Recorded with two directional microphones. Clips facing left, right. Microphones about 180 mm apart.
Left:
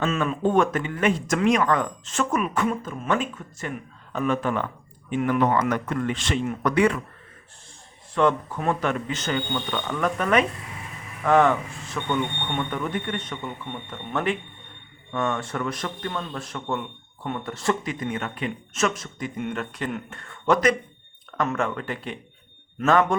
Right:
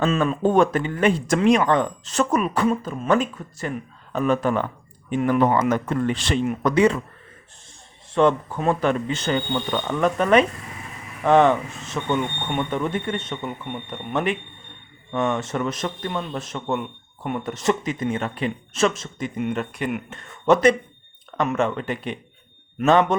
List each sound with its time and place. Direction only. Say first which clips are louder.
0.0 s speech: right 3 dB; 35° right (ahead or behind)
6.4 s speech: right 3 dB; 20° right (ahead or behind)
8.1 s speech: right 3 dB; 25° right (ahead or behind)